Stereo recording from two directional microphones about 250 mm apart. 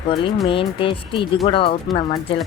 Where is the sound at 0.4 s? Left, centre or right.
Left.